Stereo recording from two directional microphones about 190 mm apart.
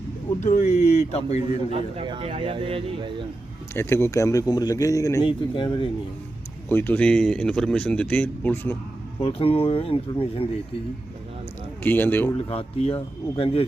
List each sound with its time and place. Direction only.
0.4 s speech: 40° left (ahead or behind)
1.4 s a man's voice: 25° right (ahead or behind)
3.8 s speech: 15° left (ahead or behind)
6.7 s speech: 10° left (ahead or behind)
9.2 s speech: 30° left (ahead or behind)
11.8 s speech: 10° left (ahead or behind)
12.5 s speech: 30° left (ahead or behind)